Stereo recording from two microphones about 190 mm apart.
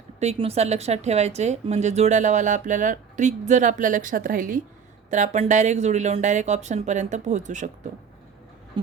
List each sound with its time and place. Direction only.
0.2 s speech: 35° right (ahead or behind)